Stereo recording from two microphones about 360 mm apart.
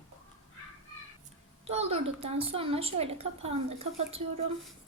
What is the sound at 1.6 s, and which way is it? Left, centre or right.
A woman's voice, centre.